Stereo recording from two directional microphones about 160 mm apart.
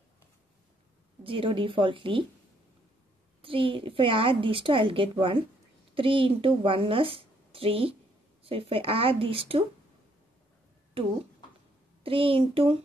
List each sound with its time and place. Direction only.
1.2 s a woman's voice: 35° right (ahead or behind)
3.4 s a woman's voice: 35° right (ahead or behind)
12.0 s a woman's voice: 35° right (ahead or behind)